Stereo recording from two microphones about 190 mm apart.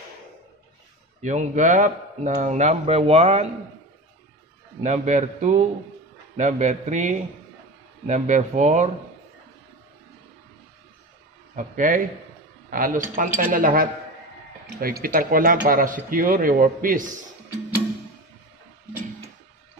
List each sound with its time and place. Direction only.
1.2 s speech: 40° right (ahead or behind)
4.8 s speech: 35° right (ahead or behind)
11.5 s speech: 45° right (ahead or behind)